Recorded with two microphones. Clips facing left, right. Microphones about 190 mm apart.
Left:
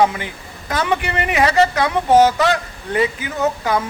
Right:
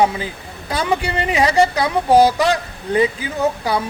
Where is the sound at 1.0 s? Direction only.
35° right (ahead or behind).